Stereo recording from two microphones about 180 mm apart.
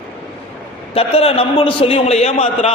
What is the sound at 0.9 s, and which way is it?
A man's voice, 35° left (ahead or behind).